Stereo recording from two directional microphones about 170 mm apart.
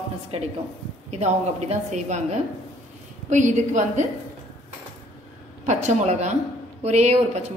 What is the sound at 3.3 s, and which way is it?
Speech, 45° right (ahead or behind).